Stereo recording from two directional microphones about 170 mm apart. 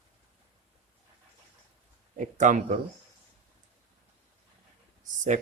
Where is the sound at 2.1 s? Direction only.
45° right (ahead or behind).